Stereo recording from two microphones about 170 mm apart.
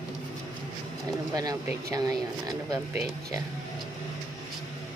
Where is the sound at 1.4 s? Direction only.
20° right (ahead or behind).